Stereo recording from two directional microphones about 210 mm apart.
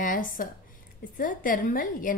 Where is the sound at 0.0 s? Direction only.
40° left (ahead or behind).